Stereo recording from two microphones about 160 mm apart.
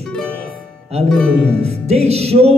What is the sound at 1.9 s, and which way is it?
Speech, 40° right (ahead or behind).